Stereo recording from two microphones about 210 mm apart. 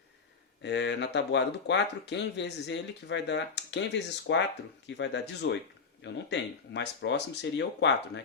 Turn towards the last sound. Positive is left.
turn(degrees=55)  # may be behind; listen again after turning